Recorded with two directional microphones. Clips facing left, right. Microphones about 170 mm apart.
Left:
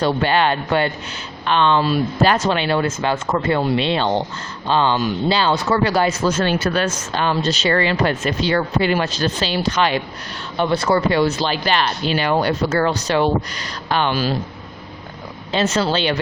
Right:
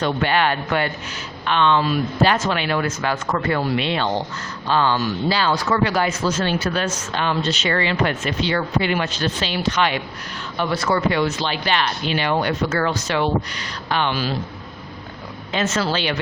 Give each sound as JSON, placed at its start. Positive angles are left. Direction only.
{"t": 0.0, "sound": "speech", "side_deg": 30}
{"t": 6.3, "sound": "speech", "side_deg": 55}
{"t": 7.1, "sound": "speech", "side_deg": 35}
{"t": 15.5, "sound": "speech", "side_deg": 35}